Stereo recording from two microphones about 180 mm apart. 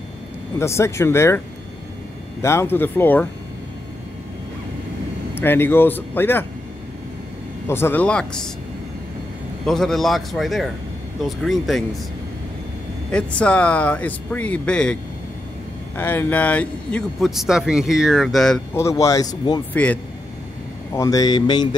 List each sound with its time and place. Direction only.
0.6 s speech: 15° left (ahead or behind)
2.4 s speech: 15° left (ahead or behind)
5.3 s speech: 10° left (ahead or behind)
7.6 s speech: 15° left (ahead or behind)
9.7 s speech: centre (ahead or behind)
13.1 s speech: 5° left (ahead or behind)
16.0 s speech: 10° left (ahead or behind)
18.7 s speech: 15° left (ahead or behind)
19.7 s speech: 10° left (ahead or behind)
20.9 s speech: 20° left (ahead or behind)